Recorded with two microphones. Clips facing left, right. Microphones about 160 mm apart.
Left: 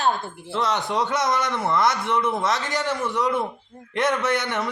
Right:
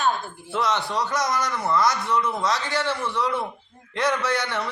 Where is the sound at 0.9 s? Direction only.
25° left (ahead or behind).